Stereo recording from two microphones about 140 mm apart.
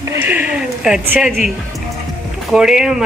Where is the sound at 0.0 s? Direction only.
15° right (ahead or behind).